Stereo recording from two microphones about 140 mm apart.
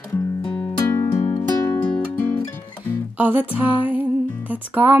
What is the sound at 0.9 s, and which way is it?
Music, 20° left (ahead or behind).